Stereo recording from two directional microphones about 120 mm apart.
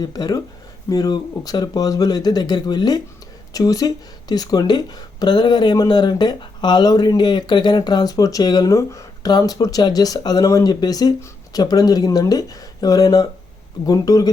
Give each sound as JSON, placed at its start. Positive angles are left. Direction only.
{"t": 0.0, "sound": "speech", "side_deg": 35}